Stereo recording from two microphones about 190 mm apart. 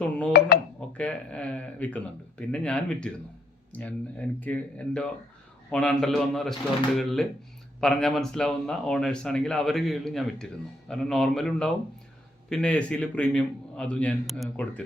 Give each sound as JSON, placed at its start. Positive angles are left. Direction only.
{"t": 0.0, "sound": "speech", "side_deg": 5}
{"t": 0.3, "sound": "speech", "side_deg": 55}
{"t": 0.8, "sound": "a man's voice", "side_deg": 5}